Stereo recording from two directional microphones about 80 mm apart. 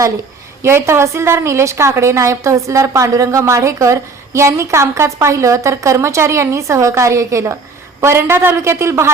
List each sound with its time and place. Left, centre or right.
0.6 s a woman's voice: right